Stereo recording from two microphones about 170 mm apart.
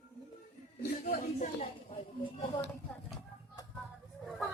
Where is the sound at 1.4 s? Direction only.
40° left (ahead or behind).